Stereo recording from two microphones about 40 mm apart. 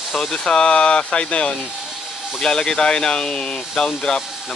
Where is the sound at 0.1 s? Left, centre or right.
Centre.